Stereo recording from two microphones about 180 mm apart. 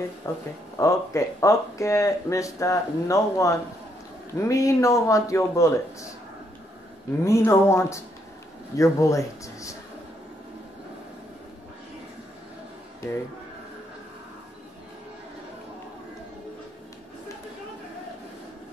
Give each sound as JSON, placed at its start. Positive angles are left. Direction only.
{"t": 0.2, "sound": "speech", "side_deg": 20}
{"t": 7.2, "sound": "speech", "side_deg": 15}